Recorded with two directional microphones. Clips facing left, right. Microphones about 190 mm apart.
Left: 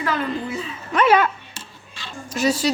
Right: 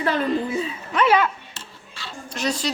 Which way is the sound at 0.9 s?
50° left (ahead or behind).